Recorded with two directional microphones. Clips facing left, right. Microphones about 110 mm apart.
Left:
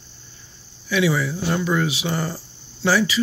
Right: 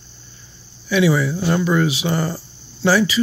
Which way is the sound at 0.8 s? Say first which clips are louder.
Right 4 dB; 30° right (ahead or behind).